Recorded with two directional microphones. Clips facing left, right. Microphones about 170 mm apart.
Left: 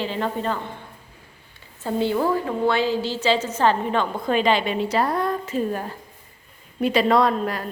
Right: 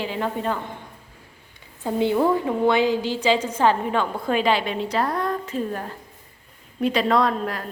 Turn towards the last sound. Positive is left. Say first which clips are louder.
# left 2 dB
turn(degrees=0)  # may be behind; listen again after turning